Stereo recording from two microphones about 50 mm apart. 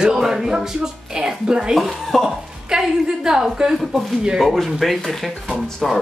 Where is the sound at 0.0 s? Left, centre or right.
Centre.